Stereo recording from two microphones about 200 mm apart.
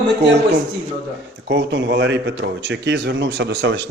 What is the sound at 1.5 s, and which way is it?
Speech, 60° right (ahead or behind).